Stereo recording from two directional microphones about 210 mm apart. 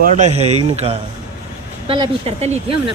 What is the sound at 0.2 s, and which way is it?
Speech, 30° right (ahead or behind).